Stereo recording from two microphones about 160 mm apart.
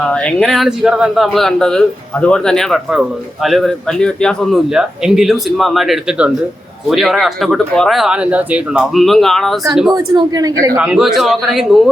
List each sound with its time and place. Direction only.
0.0 s a man's voice: 5° left (ahead or behind)
9.9 s speech: 25° right (ahead or behind)
10.8 s a man's voice: 5° right (ahead or behind)